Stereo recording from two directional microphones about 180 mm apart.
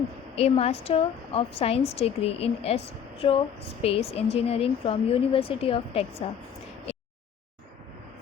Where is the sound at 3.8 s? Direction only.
35° left (ahead or behind).